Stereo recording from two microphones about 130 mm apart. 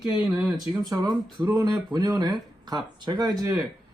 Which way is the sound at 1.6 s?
30° right (ahead or behind).